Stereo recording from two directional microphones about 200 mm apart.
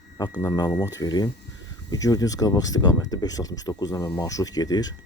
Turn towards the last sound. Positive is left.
turn(degrees=20)  # may be behind; listen again after turning